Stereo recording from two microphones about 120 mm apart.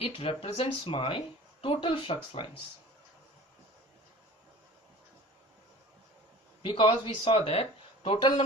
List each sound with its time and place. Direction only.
0.0 s speech: 55° left (ahead or behind)
6.6 s speech: 45° left (ahead or behind)